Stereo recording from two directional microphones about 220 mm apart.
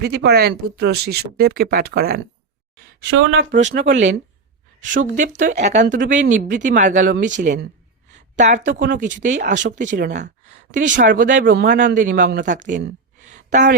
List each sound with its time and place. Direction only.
0.0 s speech: 50° right (ahead or behind)
3.1 s speech: 60° right (ahead or behind)
4.8 s a woman's voice: 35° right (ahead or behind)